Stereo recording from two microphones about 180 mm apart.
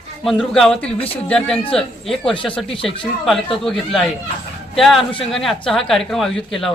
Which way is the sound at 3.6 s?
Centre (ahead or behind).